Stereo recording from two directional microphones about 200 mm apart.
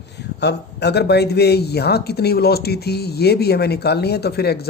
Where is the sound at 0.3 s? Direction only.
55° left (ahead or behind).